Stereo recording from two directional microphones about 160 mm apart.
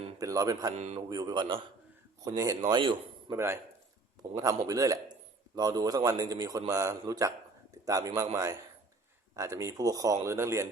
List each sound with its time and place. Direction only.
0.2 s a man's voice: 20° right (ahead or behind)
0.8 s speech: 45° right (ahead or behind)
1.1 s a man's voice: 25° right (ahead or behind)
3.2 s a man's voice: 15° right (ahead or behind)